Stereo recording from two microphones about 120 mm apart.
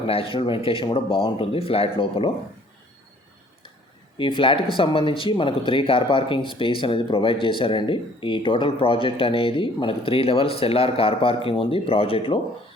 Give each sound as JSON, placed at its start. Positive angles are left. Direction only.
{"t": 0.1, "sound": "speech", "side_deg": 50}
{"t": 4.2, "sound": "speech", "side_deg": 45}